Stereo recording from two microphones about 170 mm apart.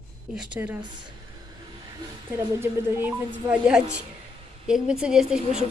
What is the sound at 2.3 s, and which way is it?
A woman's voice, 10° right (ahead or behind).